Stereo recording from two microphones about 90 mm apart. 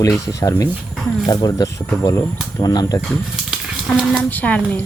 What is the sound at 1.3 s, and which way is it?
Speech, 45° left (ahead or behind).